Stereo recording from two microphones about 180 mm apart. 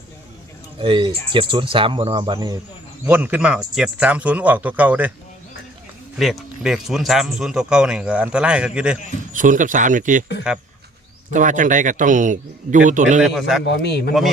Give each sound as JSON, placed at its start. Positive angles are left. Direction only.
{"t": 0.8, "sound": "speech", "side_deg": -30}
{"t": 3.1, "sound": "speech", "side_deg": -10}
{"t": 6.1, "sound": "a man's voice", "side_deg": 0}
{"t": 9.3, "sound": "a man's voice", "side_deg": -45}
{"t": 11.3, "sound": "a man's voice", "side_deg": -45}
{"t": 13.7, "sound": "a man's voice", "side_deg": 70}